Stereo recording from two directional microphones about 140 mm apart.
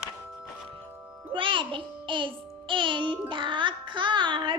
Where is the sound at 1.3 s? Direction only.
35° right (ahead or behind).